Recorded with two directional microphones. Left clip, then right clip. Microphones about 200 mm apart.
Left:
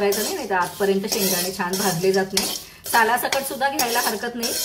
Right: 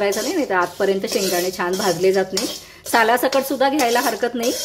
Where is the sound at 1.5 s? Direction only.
50° right (ahead or behind).